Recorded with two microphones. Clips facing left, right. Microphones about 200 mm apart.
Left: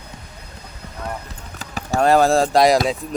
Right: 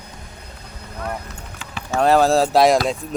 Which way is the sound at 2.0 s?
Centre (ahead or behind).